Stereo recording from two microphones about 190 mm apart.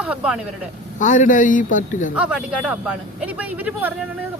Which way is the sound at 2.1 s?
5° right (ahead or behind).